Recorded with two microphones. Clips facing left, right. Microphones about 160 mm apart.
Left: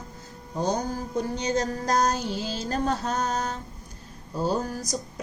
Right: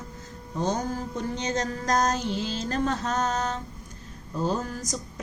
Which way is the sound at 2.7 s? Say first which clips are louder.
Left 1 dB; 40° left (ahead or behind).